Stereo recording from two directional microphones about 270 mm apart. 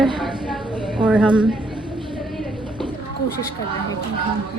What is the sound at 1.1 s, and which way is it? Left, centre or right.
Speech, centre.